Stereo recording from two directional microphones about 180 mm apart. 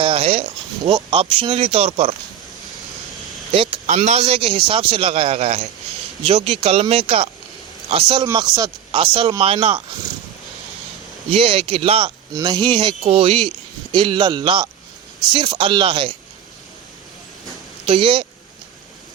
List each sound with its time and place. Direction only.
0.0 s a sound: 30° right (ahead or behind)
0.9 s speech: 30° right (ahead or behind)
3.5 s speech: 30° right (ahead or behind)
11.3 s speech: 30° right (ahead or behind)
17.8 s speech: 30° right (ahead or behind)